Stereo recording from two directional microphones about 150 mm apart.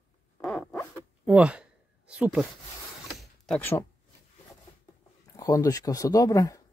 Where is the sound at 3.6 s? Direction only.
15° left (ahead or behind).